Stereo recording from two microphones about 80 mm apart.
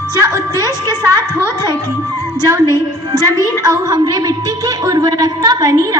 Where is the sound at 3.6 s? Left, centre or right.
Right.